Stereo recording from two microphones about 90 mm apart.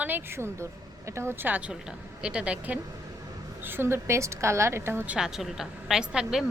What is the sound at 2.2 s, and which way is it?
Speech, 10° right (ahead or behind).